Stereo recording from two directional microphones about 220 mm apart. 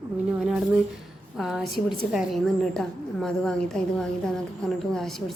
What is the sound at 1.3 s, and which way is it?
A woman's voice, centre (ahead or behind).